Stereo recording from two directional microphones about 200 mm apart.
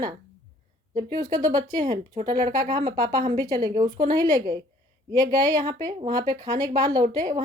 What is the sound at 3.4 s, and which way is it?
A woman's voice, 20° right (ahead or behind).